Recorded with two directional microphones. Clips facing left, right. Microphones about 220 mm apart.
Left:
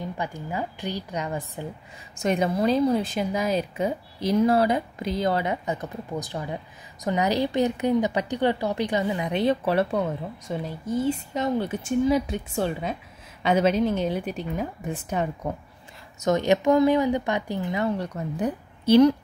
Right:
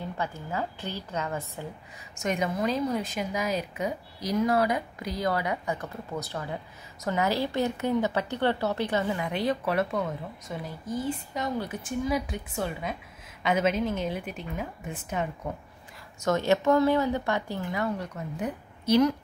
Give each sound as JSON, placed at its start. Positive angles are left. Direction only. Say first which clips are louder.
{"t": 0.0, "sound": "a woman's voice", "louder": "left 2 dB", "side_deg": 15}
{"t": 2.1, "sound": "a woman's voice", "louder": "left 5 dB", "side_deg": 30}
{"t": 16.2, "sound": "a woman's voice", "louder": "left 3 dB", "side_deg": 20}